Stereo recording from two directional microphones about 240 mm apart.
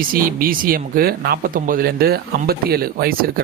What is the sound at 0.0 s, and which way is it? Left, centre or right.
Speech, right.